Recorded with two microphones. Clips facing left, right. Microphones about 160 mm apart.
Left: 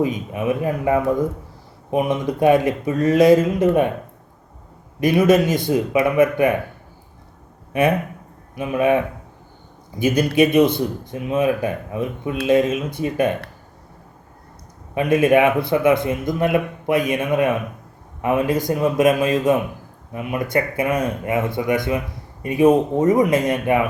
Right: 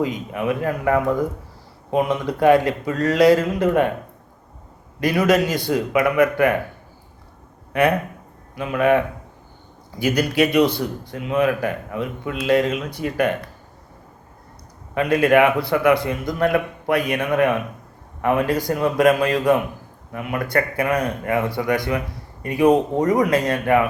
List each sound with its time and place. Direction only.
0.0 s speech: 20° left (ahead or behind)
4.9 s speech: 20° left (ahead or behind)
7.7 s speech: 20° left (ahead or behind)
14.9 s speech: 20° left (ahead or behind)
23.0 s speech: 25° left (ahead or behind)